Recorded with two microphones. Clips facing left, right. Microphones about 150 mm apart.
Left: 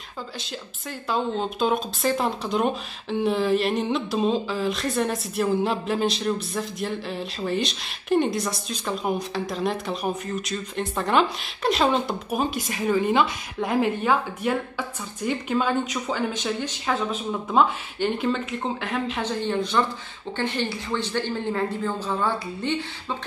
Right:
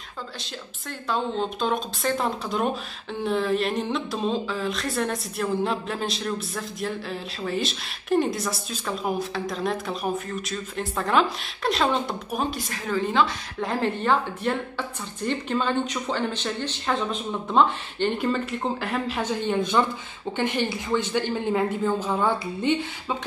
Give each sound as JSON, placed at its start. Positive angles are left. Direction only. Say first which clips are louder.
{"t": 1.0, "sound": "speech", "louder": "left 1 dB", "side_deg": 0}
{"t": 12.6, "sound": "a woman's voice", "louder": "left 4 dB", "side_deg": 15}
{"t": 18.2, "sound": "speech", "louder": "even", "side_deg": 0}
{"t": 19.4, "sound": "a woman's voice", "louder": "right 1 dB", "side_deg": -15}